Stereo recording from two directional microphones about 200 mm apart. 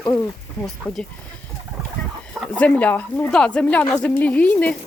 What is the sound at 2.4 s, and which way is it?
A woman's voice, 5° left (ahead or behind).